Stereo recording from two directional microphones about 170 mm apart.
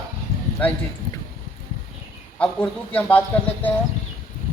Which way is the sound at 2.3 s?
10° left (ahead or behind).